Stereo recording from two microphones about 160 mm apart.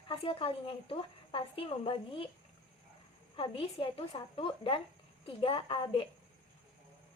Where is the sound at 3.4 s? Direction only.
35° left (ahead or behind).